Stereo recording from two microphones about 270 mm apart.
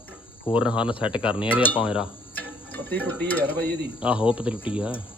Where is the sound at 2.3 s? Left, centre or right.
Centre.